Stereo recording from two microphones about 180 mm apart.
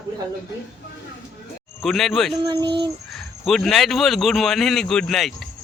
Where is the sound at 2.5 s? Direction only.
25° right (ahead or behind).